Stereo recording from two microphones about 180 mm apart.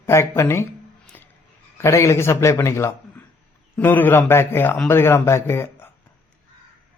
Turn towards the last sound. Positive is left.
turn(degrees=15)  # may be behind; listen again after turning